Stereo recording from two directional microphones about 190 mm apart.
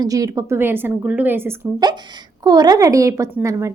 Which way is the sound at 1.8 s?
25° right (ahead or behind).